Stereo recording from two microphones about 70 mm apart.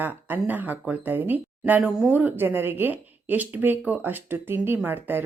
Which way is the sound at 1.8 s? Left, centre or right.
Centre.